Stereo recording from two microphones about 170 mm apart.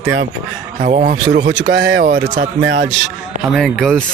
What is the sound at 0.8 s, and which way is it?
Speech, 55° right (ahead or behind).